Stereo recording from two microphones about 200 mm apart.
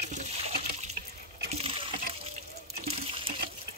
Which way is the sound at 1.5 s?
30° right (ahead or behind).